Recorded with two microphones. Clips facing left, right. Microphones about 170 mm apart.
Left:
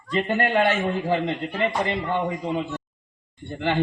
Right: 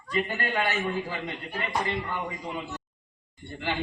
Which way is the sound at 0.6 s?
40° left (ahead or behind).